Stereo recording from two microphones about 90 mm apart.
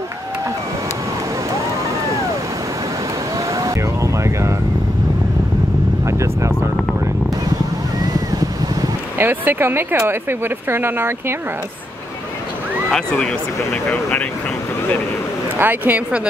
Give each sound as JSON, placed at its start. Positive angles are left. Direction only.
{"t": 3.5, "sound": "vehicle", "side_deg": -35}
{"t": 6.0, "sound": "vehicle", "side_deg": -35}
{"t": 9.2, "sound": "speech", "side_deg": -20}
{"t": 12.9, "sound": "speech", "side_deg": 5}
{"t": 15.6, "sound": "speech", "side_deg": -20}